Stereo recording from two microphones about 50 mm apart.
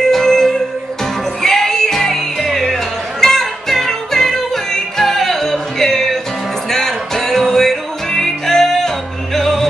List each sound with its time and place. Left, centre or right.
0.1 s music: centre